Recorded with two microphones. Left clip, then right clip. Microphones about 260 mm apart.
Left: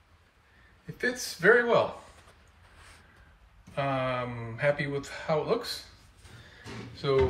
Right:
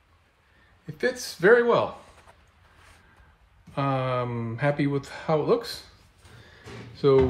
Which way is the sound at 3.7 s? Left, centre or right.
Right.